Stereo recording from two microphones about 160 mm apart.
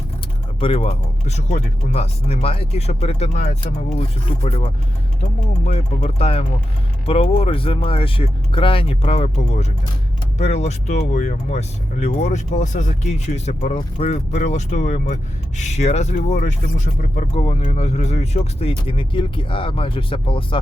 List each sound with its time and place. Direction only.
0.6 s speech: 35° left (ahead or behind); by 17.4 s 50° left (ahead or behind)
17.4 s speech: 35° left (ahead or behind)